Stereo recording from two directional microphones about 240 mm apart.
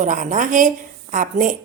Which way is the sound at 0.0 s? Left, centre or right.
Right.